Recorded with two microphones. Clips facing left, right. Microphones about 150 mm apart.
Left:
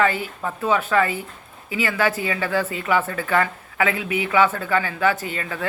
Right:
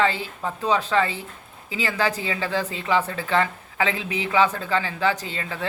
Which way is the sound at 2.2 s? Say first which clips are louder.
Left 3 dB; 20° right (ahead or behind).